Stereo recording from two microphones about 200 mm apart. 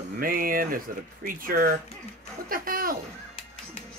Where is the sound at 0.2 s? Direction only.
45° right (ahead or behind).